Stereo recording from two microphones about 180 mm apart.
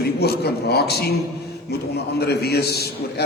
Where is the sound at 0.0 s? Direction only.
65° left (ahead or behind).